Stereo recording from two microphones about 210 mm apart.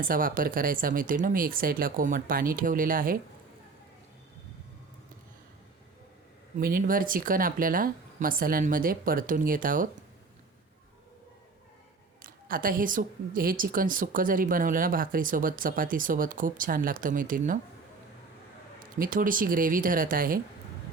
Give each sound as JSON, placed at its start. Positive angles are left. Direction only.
{"t": 0.0, "sound": "a woman's voice", "side_deg": -40}
{"t": 6.6, "sound": "a woman's voice", "side_deg": -40}
{"t": 12.2, "sound": "a woman's voice", "side_deg": -40}
{"t": 18.9, "sound": "a woman's voice", "side_deg": -40}